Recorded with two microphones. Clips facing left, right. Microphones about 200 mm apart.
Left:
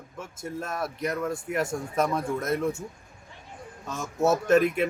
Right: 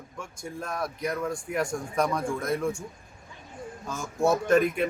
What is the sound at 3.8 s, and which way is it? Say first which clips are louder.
Speech: left 1 dB; centre (ahead or behind).